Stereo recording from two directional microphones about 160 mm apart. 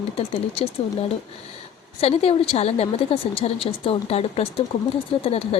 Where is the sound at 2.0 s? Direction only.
35° left (ahead or behind).